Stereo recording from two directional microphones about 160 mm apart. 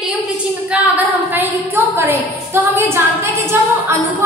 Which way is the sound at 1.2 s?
10° right (ahead or behind).